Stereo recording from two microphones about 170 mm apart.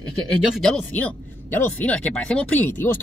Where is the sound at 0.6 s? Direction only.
5° left (ahead or behind).